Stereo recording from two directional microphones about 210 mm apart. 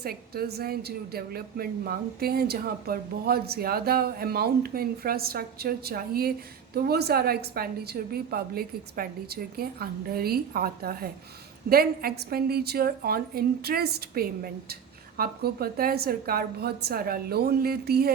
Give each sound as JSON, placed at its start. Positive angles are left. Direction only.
{"t": 0.0, "sound": "a woman's voice", "side_deg": -45}